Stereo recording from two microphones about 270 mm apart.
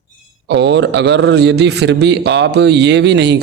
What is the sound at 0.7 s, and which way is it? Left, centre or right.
A man's voice, right.